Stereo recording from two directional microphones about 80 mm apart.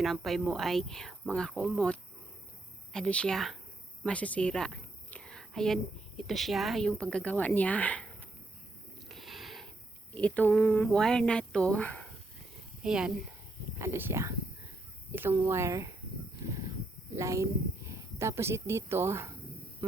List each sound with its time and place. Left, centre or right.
0.0 s a woman's voice: centre
4.0 s a woman's voice: centre
6.8 s a woman's voice: centre
9.0 s a sound: centre
10.2 s a woman's voice: centre
10.6 s a sound: left
10.8 s a woman's voice: centre
12.8 s speech: centre
13.7 s speech: right
15.1 s speech: right
16.4 s a sound: right
17.2 s speech: right